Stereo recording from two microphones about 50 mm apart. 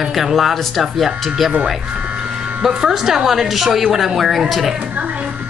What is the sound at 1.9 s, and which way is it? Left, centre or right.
Speech, right.